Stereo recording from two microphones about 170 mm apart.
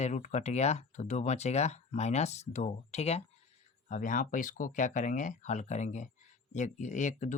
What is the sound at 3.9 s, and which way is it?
Speech, 50° left (ahead or behind).